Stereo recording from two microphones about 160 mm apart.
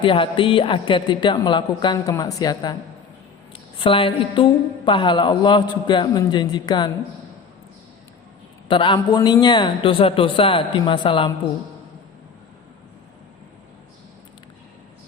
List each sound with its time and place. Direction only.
0.0 s a man's voice: 30° left (ahead or behind)
8.6 s a man's voice: 30° left (ahead or behind)